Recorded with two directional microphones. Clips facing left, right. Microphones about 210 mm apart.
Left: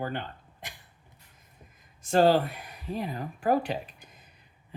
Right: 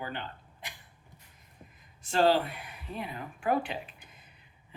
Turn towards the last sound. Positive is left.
turn(degrees=40)  # may be behind; listen again after turning